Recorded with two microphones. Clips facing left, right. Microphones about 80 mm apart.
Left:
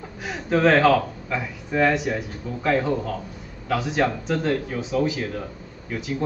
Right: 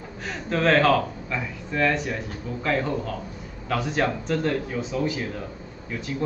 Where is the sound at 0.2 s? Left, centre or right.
Centre.